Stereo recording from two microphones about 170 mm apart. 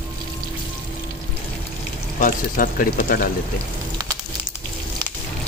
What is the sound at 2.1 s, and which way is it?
A man's voice, 50° left (ahead or behind).